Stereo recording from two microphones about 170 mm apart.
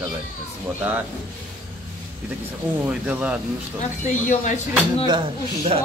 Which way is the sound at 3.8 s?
50° left (ahead or behind).